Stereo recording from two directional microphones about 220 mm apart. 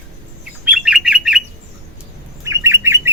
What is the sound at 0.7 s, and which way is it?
Bird, centre (ahead or behind).